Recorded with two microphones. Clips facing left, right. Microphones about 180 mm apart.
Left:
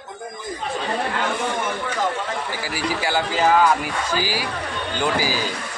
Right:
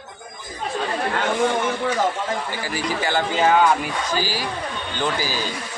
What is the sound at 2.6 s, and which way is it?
Speech, 10° left (ahead or behind).